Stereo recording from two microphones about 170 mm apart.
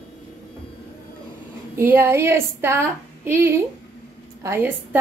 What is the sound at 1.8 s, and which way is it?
A woman's voice, 15° right (ahead or behind).